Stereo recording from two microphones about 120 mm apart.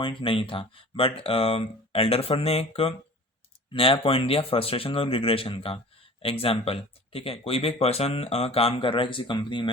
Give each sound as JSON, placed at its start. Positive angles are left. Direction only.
{"t": 0.0, "sound": "speech", "side_deg": 45}